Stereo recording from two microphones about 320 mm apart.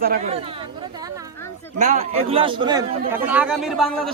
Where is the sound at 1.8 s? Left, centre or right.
Right.